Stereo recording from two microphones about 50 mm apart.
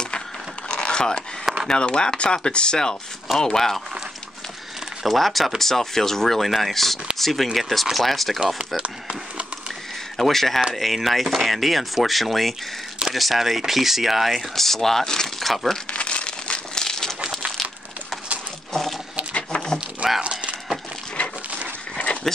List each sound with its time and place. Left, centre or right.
0.7 s a sound: centre
1.7 s speech: centre
5.0 s speech: centre
10.1 s speech: centre
14.5 s speech: centre
15.9 s crumpling: left
18.7 s a sound: centre
19.3 s a sound: centre
20.2 s livestock: right
21.2 s dog: left